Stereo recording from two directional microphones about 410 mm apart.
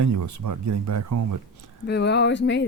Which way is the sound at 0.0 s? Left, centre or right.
Right.